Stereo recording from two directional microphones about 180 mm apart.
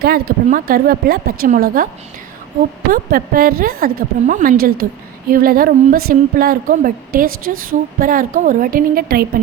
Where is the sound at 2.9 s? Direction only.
55° right (ahead or behind).